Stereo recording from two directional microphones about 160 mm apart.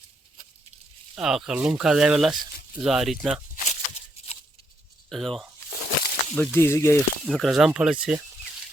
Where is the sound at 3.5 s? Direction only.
40° left (ahead or behind).